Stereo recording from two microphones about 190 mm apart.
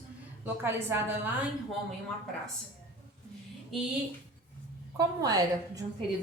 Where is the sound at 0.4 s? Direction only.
10° right (ahead or behind).